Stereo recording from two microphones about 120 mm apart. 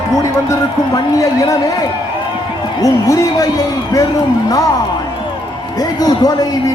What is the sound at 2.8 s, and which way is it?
A man's voice, 25° left (ahead or behind).